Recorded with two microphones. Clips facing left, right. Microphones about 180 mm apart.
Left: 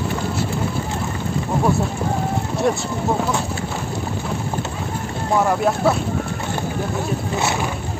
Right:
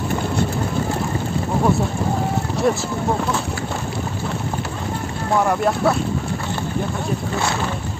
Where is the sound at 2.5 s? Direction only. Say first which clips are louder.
Right 1 dB; centre (ahead or behind).